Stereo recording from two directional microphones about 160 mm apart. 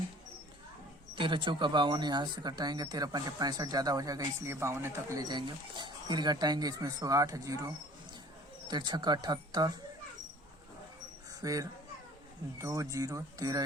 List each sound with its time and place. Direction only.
1.1 s speech: 30° right (ahead or behind)
8.6 s speech: 30° right (ahead or behind)
11.4 s speech: 20° right (ahead or behind)